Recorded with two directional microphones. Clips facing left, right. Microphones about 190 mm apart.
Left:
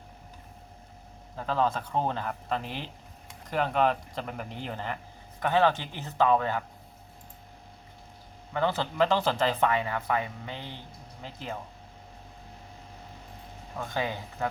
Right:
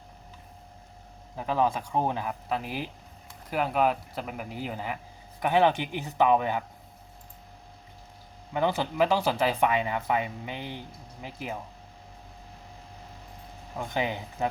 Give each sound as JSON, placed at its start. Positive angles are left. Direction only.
{"t": 1.4, "sound": "speech", "side_deg": -15}
{"t": 8.5, "sound": "speech", "side_deg": -15}
{"t": 13.7, "sound": "speech", "side_deg": -15}